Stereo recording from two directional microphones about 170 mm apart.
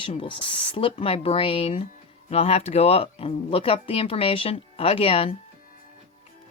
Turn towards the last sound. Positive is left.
turn(degrees=35)  # may be behind; listen again after turning